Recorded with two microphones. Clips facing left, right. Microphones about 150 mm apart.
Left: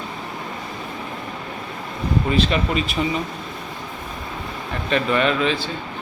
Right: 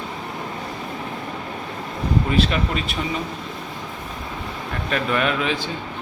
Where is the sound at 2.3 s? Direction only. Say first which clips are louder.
Left 3 dB; centre (ahead or behind).